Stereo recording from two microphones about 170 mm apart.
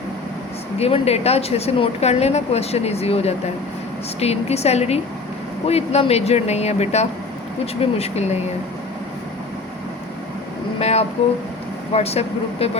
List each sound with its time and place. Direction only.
0.8 s a woman's voice: 35° left (ahead or behind)
10.8 s a woman's voice: 40° left (ahead or behind)